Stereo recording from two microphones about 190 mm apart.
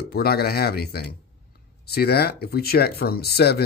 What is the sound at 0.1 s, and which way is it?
Speech, 55° left (ahead or behind).